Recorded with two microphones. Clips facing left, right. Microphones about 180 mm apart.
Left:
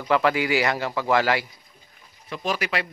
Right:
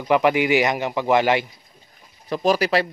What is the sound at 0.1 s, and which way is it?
Speech, 20° right (ahead or behind).